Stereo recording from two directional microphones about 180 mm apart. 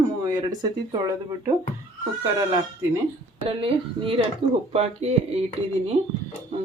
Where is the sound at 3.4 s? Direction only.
30° right (ahead or behind).